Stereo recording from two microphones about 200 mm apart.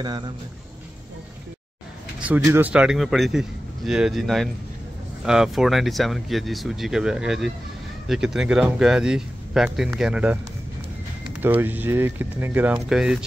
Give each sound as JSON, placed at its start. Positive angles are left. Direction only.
{"t": 0.0, "sound": "speech", "side_deg": -20}
{"t": 2.1, "sound": "speech", "side_deg": -5}
{"t": 11.4, "sound": "speech", "side_deg": -10}